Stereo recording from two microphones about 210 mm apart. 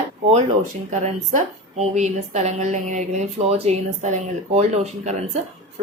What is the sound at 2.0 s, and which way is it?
A woman's voice, 35° right (ahead or behind).